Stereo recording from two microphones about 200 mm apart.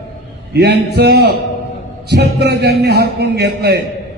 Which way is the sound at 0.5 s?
55° right (ahead or behind).